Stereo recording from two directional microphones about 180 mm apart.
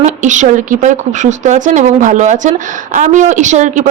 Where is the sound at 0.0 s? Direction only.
40° right (ahead or behind).